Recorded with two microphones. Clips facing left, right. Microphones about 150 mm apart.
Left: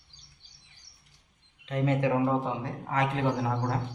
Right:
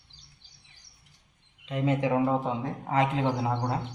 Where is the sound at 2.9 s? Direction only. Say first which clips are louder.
Right 2 dB; 25° right (ahead or behind).